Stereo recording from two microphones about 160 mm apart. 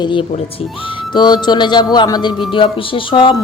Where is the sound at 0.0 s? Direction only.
30° left (ahead or behind).